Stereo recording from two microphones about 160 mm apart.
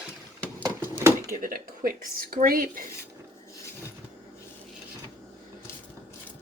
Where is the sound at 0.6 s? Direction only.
15° right (ahead or behind).